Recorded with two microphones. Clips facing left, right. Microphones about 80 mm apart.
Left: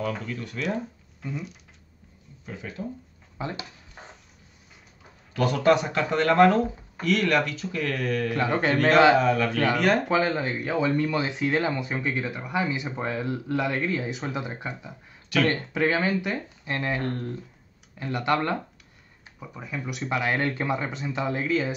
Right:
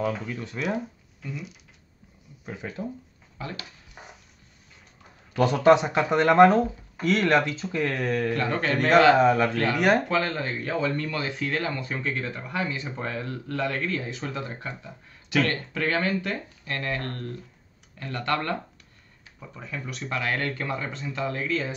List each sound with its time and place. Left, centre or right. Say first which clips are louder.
0.0 s speech: right 2 dB; centre
0.6 s speech: right 1 dB; centre
2.4 s speech: right 2 dB; right
3.3 s speech: left 3 dB; left
5.3 s speech: right 3 dB; right
8.4 s a man's voice: left 2 dB; centre
9.1 s speech: right 2 dB; right
10.0 s speech: left 2 dB; centre